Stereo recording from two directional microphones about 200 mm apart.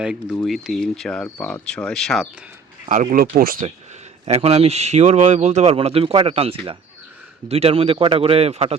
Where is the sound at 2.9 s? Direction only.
45° right (ahead or behind).